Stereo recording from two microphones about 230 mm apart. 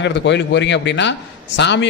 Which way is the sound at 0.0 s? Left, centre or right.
Left.